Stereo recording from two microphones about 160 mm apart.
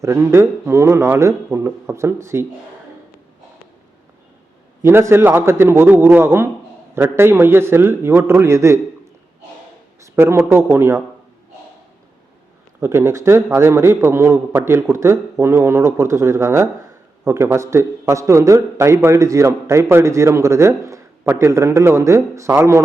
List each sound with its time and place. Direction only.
0.0 s speech: 15° right (ahead or behind)
4.8 s speech: 15° right (ahead or behind)
10.2 s speech: 15° right (ahead or behind)
12.8 s speech: 15° right (ahead or behind)